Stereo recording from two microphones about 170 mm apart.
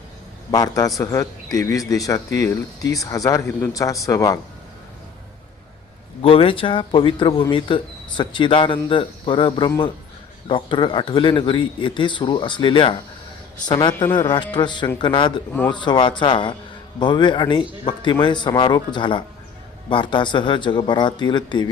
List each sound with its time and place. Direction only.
0.5 s speech: 20° left (ahead or behind)
6.2 s speech: 35° left (ahead or behind)
13.9 s speech: 10° left (ahead or behind)
14.2 s speech: 25° left (ahead or behind)